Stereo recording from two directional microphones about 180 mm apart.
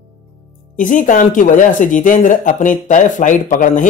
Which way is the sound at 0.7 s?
45° left (ahead or behind).